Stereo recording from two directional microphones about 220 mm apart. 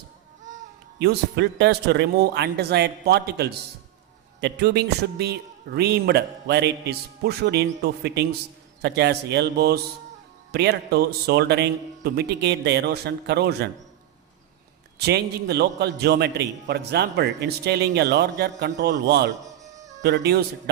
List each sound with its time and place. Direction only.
0.9 s a man's voice: 50° right (ahead or behind)
14.9 s a man's voice: 50° right (ahead or behind)